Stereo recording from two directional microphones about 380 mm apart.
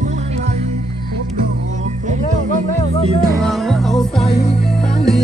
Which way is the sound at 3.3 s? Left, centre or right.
Centre.